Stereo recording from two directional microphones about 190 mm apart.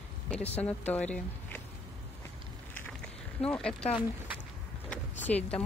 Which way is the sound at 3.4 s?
5° left (ahead or behind).